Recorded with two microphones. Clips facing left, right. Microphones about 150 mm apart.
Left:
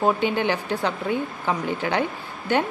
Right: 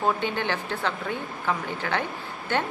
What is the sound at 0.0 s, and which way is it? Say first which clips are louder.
A woman's voice: left 5 dB; 15° left (ahead or behind).